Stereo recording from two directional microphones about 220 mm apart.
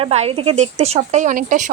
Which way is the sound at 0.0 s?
25° right (ahead or behind).